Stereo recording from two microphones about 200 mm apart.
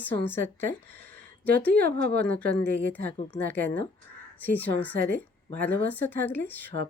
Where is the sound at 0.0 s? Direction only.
10° left (ahead or behind).